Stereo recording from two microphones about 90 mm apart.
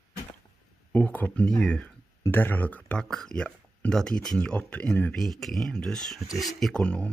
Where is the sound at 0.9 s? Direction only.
15° left (ahead or behind).